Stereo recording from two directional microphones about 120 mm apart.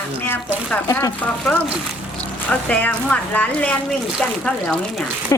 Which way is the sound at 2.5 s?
10° left (ahead or behind).